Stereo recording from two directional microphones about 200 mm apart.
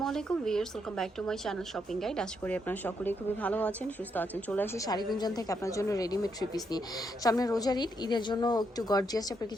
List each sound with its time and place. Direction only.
0.0 s a woman's voice: centre (ahead or behind); by 9.2 s 20° left (ahead or behind)